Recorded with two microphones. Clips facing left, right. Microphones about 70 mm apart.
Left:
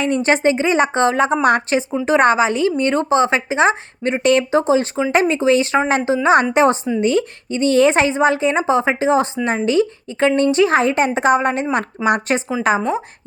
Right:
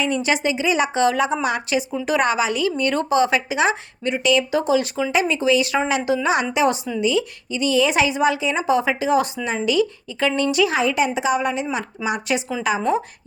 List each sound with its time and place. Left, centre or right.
0.0 s a woman's voice: left
1.9 s a woman's voice: left
4.6 s a woman's voice: left